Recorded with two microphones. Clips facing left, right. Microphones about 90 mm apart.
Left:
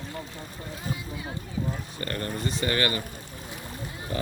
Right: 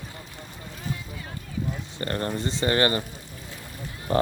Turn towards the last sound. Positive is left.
turn(degrees=-45)  # may be behind; listen again after turning